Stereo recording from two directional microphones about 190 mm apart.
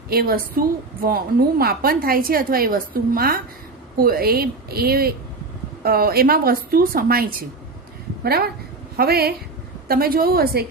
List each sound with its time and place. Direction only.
0.1 s a woman's voice: 55° right (ahead or behind)